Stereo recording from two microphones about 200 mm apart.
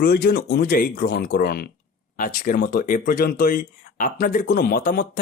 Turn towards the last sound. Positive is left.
turn(degrees=45)  # may be behind; listen again after turning